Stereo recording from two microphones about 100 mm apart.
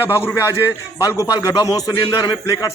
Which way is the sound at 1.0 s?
35° left (ahead or behind).